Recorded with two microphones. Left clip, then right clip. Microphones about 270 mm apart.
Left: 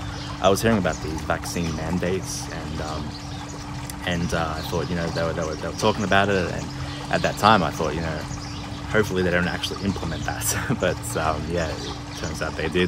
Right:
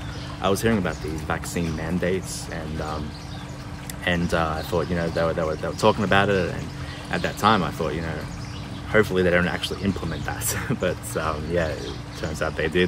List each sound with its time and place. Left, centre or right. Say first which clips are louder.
0.4 s speech: left 3 dB; centre
4.0 s speech: right 3 dB; centre